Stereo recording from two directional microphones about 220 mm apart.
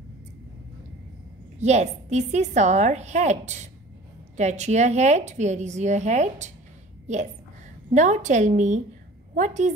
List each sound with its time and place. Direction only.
1.6 s a woman's voice: 30° right (ahead or behind)
7.9 s a woman's voice: 35° right (ahead or behind)